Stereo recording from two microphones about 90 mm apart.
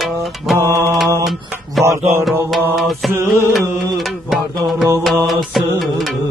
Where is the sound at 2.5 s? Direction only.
Centre (ahead or behind).